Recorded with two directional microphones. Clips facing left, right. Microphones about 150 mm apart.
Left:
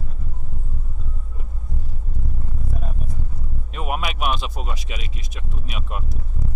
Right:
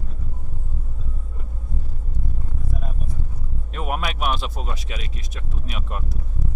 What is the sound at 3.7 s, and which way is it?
Speech, 5° left (ahead or behind).